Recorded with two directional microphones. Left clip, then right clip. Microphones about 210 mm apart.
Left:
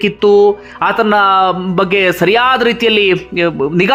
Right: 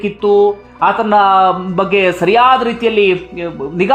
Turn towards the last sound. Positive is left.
turn(degrees=20)  # may be behind; listen again after turning